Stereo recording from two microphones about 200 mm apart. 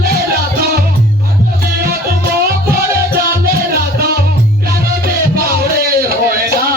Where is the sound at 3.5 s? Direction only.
50° right (ahead or behind).